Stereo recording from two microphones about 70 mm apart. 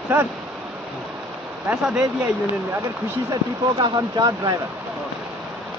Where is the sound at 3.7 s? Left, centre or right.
Right.